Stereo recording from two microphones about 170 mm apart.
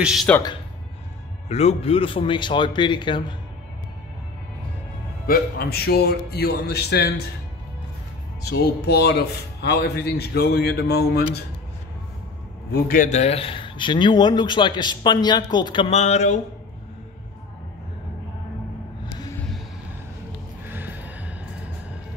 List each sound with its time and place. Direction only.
0.0 s speech: centre (ahead or behind)
1.5 s speech: 40° left (ahead or behind)
5.2 s speech: 65° left (ahead or behind)
8.5 s speech: 70° left (ahead or behind)
12.7 s speech: 55° left (ahead or behind)
19.3 s vehicle: 5° left (ahead or behind)
20.6 s music: 10° right (ahead or behind)